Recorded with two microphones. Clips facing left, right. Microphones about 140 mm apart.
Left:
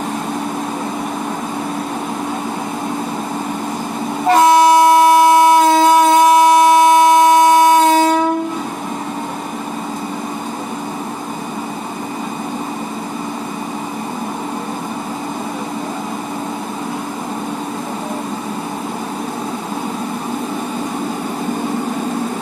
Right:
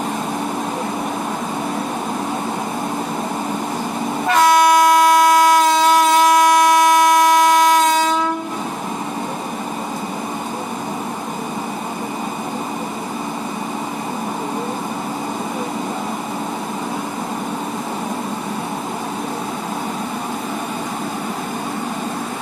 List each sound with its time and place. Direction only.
4.3 s train: 25° left (ahead or behind)